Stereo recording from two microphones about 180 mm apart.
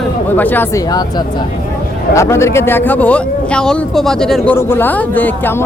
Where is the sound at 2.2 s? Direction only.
15° left (ahead or behind).